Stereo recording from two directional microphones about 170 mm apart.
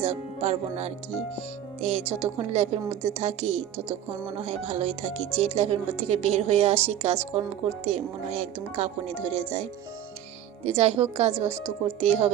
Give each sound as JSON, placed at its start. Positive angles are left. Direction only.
{"t": 0.0, "sound": "speech", "side_deg": -40}